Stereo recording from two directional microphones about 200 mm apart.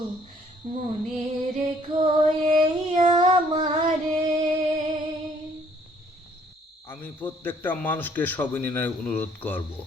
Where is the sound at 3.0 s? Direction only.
30° right (ahead or behind).